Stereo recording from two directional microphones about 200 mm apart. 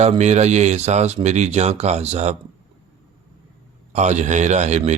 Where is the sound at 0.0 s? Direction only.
35° right (ahead or behind).